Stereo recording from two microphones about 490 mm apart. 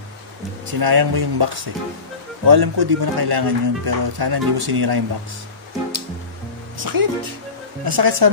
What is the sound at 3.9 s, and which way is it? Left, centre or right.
Speech, right.